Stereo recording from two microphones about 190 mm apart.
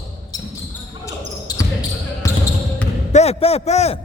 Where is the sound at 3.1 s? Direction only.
35° left (ahead or behind).